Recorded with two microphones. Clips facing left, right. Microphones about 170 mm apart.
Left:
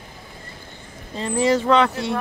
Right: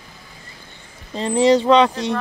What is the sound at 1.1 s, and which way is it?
Speech, 20° right (ahead or behind).